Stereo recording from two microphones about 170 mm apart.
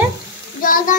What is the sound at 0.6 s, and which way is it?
Speech, 55° left (ahead or behind).